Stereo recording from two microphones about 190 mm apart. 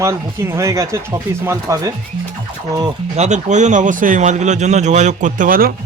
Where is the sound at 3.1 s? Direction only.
40° right (ahead or behind).